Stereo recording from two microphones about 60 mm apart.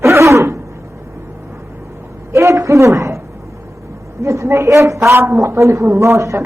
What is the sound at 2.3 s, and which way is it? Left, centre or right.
Speech, right.